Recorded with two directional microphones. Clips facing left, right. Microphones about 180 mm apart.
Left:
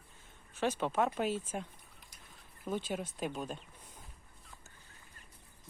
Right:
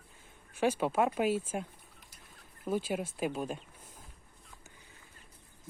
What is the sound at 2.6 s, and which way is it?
Speech, 10° right (ahead or behind).